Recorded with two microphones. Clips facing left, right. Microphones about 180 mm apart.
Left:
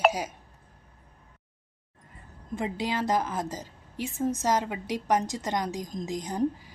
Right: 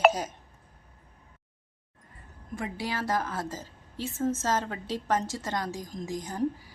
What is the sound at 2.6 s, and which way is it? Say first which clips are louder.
A woman's voice: left 4 dB; 20° left (ahead or behind).